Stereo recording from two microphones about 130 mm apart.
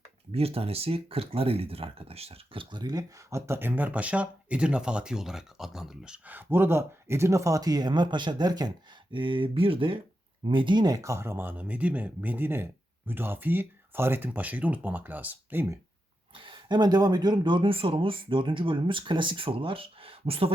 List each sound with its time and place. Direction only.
0.3 s speech: 50° right (ahead or behind); by 15.8 s 15° right (ahead or behind)
16.3 s speech: 40° right (ahead or behind)